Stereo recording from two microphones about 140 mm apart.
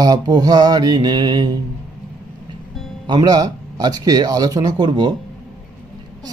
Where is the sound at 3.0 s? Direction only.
30° right (ahead or behind).